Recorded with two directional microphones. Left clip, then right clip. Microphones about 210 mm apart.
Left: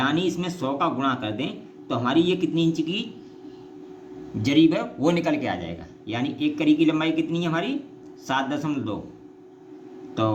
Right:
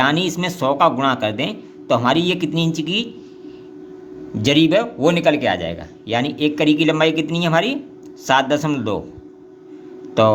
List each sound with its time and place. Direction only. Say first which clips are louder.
0.0 s a man's voice: right 6 dB; 40° right (ahead or behind)
4.4 s a man's voice: right 5 dB; 30° right (ahead or behind)